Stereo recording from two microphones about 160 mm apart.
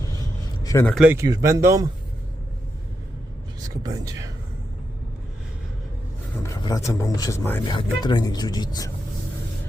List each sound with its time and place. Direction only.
0.6 s a sound: 20° left (ahead or behind)
0.9 s speech: 15° right (ahead or behind)
6.4 s speech: 20° left (ahead or behind)
7.6 s speech: 30° left (ahead or behind)